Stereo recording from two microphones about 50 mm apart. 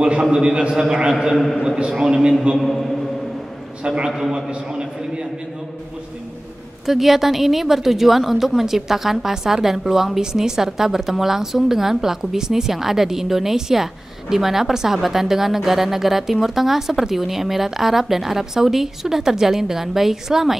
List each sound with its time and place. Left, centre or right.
0.0 s a woman's voice: centre
1.3 s a man's voice: centre
2.0 s a woman's voice: centre
2.5 s a man's voice: centre
3.8 s a man's voice: centre
4.1 s a woman's voice: centre
4.5 s a man's voice: centre
6.9 s a woman's voice: centre